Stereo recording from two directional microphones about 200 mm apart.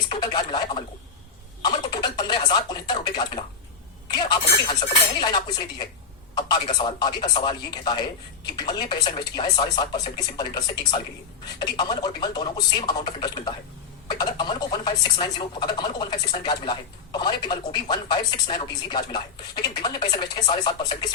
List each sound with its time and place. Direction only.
0.1 s speech: 20° left (ahead or behind)
1.6 s a sound: 20° left (ahead or behind)
4.1 s speech: 20° left (ahead or behind)